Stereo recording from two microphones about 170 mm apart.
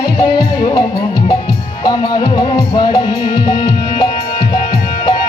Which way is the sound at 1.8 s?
25° left (ahead or behind).